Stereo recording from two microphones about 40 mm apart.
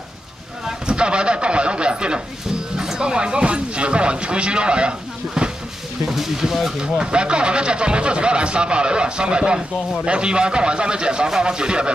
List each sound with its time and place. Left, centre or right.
0.8 s a sound: right
2.8 s speech: centre
6.0 s speech: centre
6.8 s speech: right